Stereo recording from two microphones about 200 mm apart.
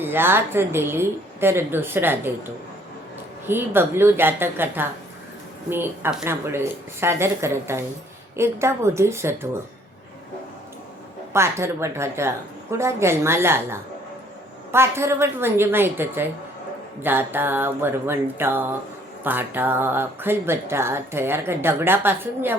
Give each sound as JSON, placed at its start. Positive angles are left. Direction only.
{"t": 0.0, "sound": "speech", "side_deg": -10}
{"t": 3.4, "sound": "speech", "side_deg": -10}
{"t": 11.3, "sound": "speech", "side_deg": -15}